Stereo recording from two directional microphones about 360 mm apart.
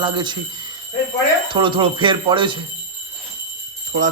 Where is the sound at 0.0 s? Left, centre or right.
Centre.